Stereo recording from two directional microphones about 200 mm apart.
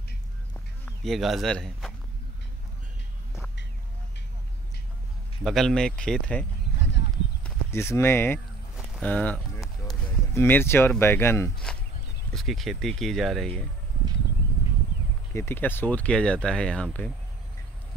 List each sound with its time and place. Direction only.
0.8 s speech: centre (ahead or behind)
5.4 s speech: centre (ahead or behind)
7.4 s speech: 10° left (ahead or behind)
12.4 s speech: centre (ahead or behind)
15.3 s speech: 10° left (ahead or behind)